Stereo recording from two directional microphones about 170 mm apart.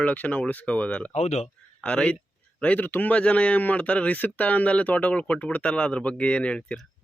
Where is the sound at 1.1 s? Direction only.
40° left (ahead or behind).